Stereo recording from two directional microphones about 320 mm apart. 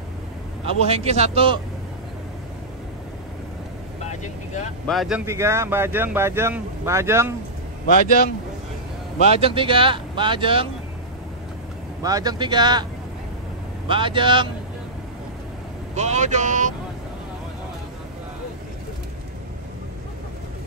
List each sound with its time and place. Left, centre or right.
0.7 s speech: centre
4.0 s vehicle: left
4.8 s speech: centre
9.3 s speech: centre
12.0 s speech: centre
13.8 s speech: centre
15.9 s speech: right